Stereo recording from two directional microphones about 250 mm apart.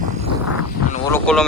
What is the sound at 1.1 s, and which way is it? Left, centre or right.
Speech, centre.